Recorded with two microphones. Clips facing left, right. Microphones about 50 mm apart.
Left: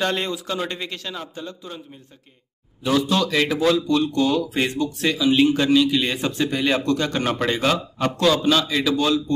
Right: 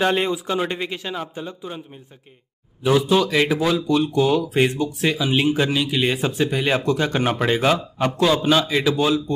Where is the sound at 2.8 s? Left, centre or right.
Centre.